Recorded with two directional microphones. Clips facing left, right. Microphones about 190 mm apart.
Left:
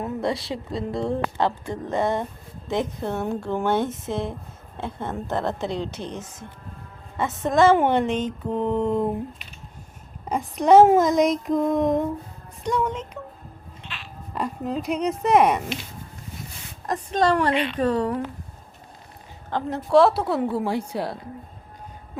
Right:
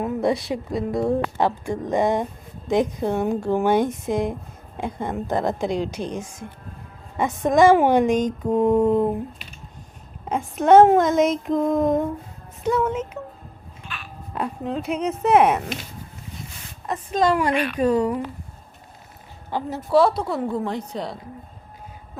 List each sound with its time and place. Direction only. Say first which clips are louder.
0.0 s a woman's voice: right 4 dB; 20° right (ahead or behind)
10.2 s speech: right 1 dB; centre (ahead or behind)
13.8 s a sound: right 2 dB; 25° left (ahead or behind)
14.3 s speech: right 1 dB; centre (ahead or behind)
16.8 s speech: right 1 dB; 5° right (ahead or behind)
17.5 s speech: right 1 dB; 25° left (ahead or behind)
17.7 s speech: right 3 dB; 10° right (ahead or behind)
19.5 s speech: left 1 dB; 10° right (ahead or behind)